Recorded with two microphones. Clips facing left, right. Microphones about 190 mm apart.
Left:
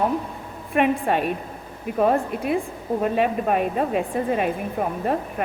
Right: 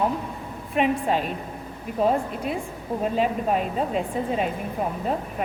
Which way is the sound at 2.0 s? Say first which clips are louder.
Left 2 dB; 60° left (ahead or behind).